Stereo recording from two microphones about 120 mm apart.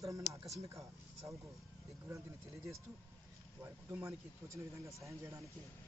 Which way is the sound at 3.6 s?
20° right (ahead or behind).